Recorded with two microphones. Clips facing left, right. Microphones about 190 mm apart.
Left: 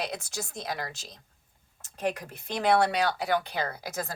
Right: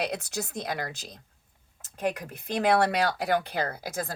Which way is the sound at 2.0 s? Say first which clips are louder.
Right 1 dB; 55° right (ahead or behind).